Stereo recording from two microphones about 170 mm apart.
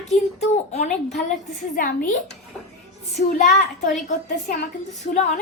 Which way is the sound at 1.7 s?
55° left (ahead or behind).